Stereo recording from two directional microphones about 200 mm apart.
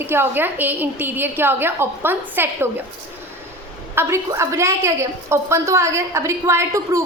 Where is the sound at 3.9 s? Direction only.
15° right (ahead or behind).